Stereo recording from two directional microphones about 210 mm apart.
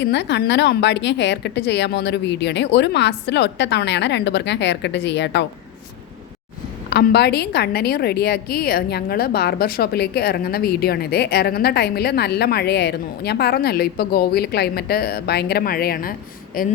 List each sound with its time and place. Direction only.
0.0 s a woman's voice: 55° left (ahead or behind)
6.9 s a woman's voice: 50° left (ahead or behind)